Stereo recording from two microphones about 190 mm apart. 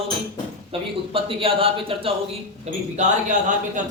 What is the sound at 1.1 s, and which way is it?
A man's voice, 30° right (ahead or behind).